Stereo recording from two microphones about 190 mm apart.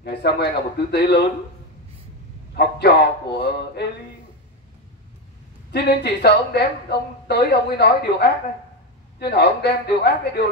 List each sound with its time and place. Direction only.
0.0 s speech: 60° left (ahead or behind)
2.5 s speech: 55° left (ahead or behind)
5.7 s speech: 60° left (ahead or behind)